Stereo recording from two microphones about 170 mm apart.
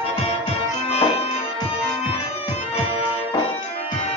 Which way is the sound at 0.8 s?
35° left (ahead or behind).